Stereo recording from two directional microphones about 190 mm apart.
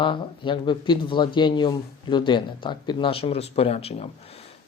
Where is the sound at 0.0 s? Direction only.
25° left (ahead or behind).